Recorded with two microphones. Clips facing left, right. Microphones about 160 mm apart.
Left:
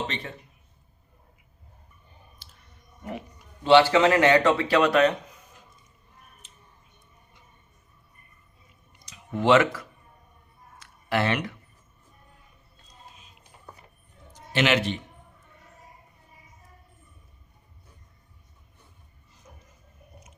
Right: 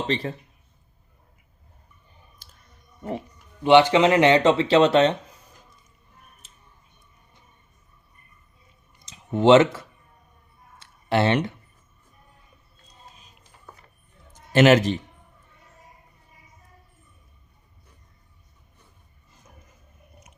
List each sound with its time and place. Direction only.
0.1 s speech: 35° right (ahead or behind)
2.4 s clicking: 45° right (ahead or behind)
3.0 s speech: 35° right (ahead or behind)
3.6 s speech: 20° right (ahead or behind)
9.0 s speech: 25° right (ahead or behind)
10.8 s a sound: 30° right (ahead or behind)
14.3 s a man's voice: 45° right (ahead or behind)